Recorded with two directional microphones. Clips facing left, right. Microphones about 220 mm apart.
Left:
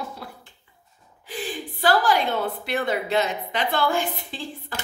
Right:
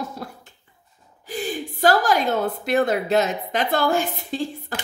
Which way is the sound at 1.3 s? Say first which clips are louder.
Right 4 dB; 40° right (ahead or behind).